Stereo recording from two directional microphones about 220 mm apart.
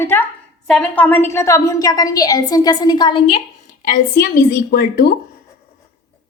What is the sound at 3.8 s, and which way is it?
A woman's voice, 40° left (ahead or behind).